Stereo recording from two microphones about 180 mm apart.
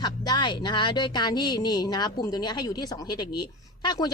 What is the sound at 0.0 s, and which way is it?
A woman's voice, 25° left (ahead or behind).